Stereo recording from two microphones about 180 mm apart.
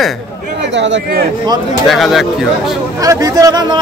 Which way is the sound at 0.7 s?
85° right.